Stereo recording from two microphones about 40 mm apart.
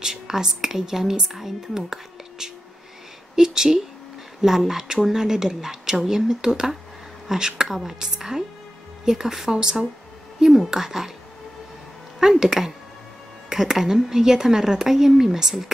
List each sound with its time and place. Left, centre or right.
0.0 s a woman's voice: centre
12.2 s speech: centre